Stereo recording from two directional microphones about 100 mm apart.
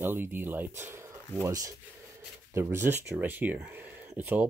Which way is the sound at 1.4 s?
35° right (ahead or behind).